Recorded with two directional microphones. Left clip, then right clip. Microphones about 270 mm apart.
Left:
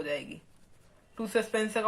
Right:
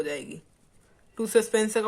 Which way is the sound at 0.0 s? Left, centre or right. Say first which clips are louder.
Right 2 dB; right.